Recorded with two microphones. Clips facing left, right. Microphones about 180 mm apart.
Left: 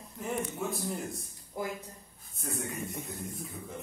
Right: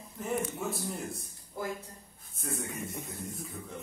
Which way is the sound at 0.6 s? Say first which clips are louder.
Left 1 dB; centre (ahead or behind).